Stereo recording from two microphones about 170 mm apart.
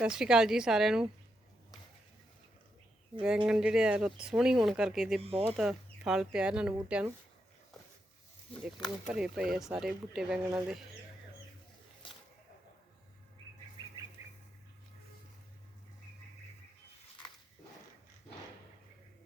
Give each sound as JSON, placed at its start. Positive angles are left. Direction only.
{"t": 0.0, "sound": "speech", "side_deg": -5}
{"t": 3.2, "sound": "speech", "side_deg": -5}
{"t": 9.0, "sound": "speech", "side_deg": -5}
{"t": 14.2, "sound": "bird", "side_deg": -15}